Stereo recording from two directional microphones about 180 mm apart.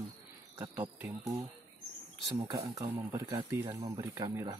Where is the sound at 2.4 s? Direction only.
20° right (ahead or behind).